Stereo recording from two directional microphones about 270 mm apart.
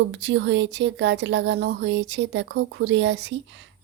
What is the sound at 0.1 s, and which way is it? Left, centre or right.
Speech, right.